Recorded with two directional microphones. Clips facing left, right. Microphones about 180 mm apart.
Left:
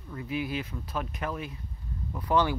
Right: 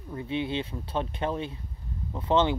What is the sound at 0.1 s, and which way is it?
Speech, 25° right (ahead or behind).